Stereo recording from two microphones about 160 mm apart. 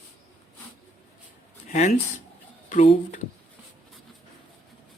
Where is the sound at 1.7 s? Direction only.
50° left (ahead or behind).